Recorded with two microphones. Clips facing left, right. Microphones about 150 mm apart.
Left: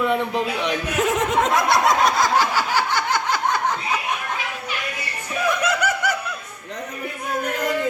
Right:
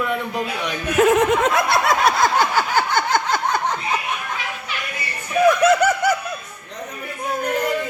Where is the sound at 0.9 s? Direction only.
60° right (ahead or behind).